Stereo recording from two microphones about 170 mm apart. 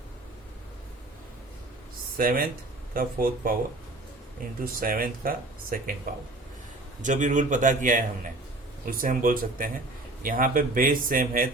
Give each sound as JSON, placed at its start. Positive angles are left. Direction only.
{"t": 2.1, "sound": "speech", "side_deg": -55}
{"t": 4.6, "sound": "speech", "side_deg": -55}
{"t": 7.0, "sound": "speech", "side_deg": -45}